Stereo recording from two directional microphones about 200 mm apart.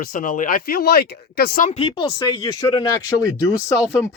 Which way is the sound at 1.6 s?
25° left (ahead or behind).